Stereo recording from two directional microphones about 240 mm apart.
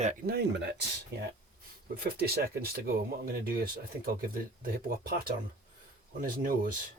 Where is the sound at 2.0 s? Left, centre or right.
Right.